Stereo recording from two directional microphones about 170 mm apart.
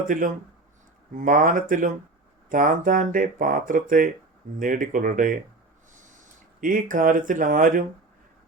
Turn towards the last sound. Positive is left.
turn(degrees=-55)  # may be behind; listen again after turning